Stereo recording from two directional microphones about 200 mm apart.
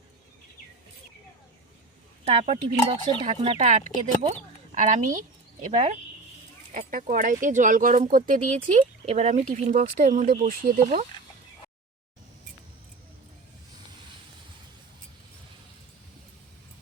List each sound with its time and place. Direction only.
2.2 s speech: 30° right (ahead or behind)